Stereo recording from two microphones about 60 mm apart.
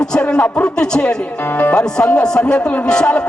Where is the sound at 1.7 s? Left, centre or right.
Centre.